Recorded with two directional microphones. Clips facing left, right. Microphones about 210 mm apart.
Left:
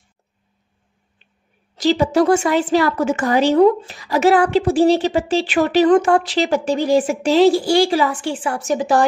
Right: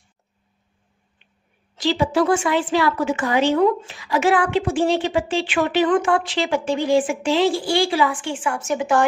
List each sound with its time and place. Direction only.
1.8 s speech: 40° left (ahead or behind)